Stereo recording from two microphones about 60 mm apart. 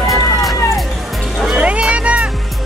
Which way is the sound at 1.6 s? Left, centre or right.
Centre.